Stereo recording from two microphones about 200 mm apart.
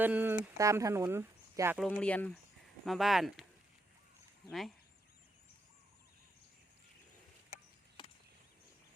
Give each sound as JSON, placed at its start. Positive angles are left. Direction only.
{"t": 0.0, "sound": "speech", "side_deg": -10}
{"t": 1.8, "sound": "speech", "side_deg": 5}